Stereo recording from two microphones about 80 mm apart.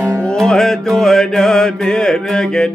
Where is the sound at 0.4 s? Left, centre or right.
Centre.